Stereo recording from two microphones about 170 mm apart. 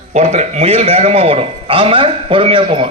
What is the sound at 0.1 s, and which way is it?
A man's voice, 40° right (ahead or behind).